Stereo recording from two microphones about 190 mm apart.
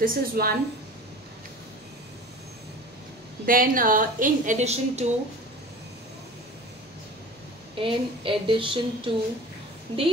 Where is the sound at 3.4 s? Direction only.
45° right (ahead or behind).